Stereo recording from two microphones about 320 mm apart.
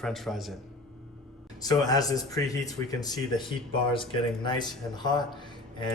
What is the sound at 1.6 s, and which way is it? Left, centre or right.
Speech, centre.